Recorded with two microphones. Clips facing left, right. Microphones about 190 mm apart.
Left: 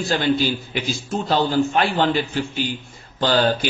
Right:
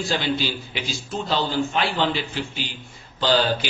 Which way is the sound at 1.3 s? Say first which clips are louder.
Left 5 dB; 50° left (ahead or behind).